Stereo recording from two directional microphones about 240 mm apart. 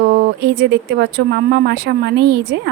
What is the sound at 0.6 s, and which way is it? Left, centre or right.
A woman's voice, right.